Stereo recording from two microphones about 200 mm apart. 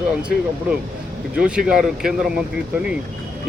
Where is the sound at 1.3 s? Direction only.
5° right (ahead or behind).